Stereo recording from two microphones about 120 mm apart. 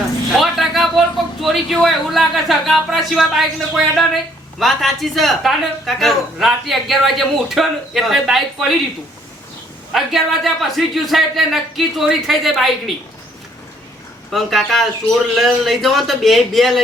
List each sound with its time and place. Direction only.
0.3 s a man's voice: centre (ahead or behind)
9.9 s speech: centre (ahead or behind)
14.3 s speech: centre (ahead or behind)